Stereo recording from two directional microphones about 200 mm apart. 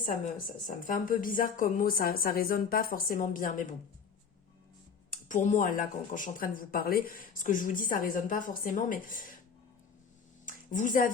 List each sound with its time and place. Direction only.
0.0 s a woman's voice: 40° left (ahead or behind)
5.1 s a woman's voice: 40° left (ahead or behind)
10.4 s a sound: 40° left (ahead or behind)